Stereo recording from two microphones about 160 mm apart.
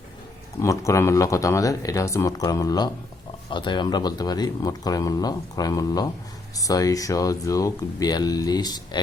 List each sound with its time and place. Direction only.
0.6 s speech: 20° left (ahead or behind)